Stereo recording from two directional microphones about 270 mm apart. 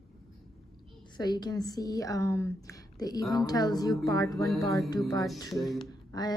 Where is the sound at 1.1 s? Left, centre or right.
Centre.